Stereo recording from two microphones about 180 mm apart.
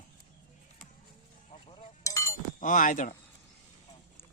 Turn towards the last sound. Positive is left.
turn(degrees=45)  # may be behind; listen again after turning